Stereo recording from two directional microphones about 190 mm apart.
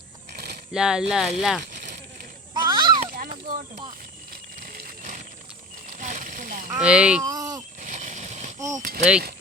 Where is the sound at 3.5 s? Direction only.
45° right (ahead or behind).